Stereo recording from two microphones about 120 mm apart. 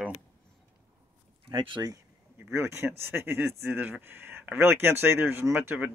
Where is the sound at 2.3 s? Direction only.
20° right (ahead or behind).